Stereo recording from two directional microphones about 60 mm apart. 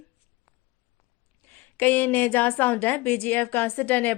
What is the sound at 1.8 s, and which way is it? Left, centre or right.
Speech, left.